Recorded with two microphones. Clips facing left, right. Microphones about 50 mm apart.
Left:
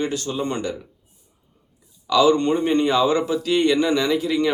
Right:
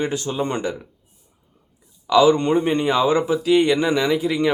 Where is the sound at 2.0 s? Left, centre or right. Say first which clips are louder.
Right 2 dB; centre.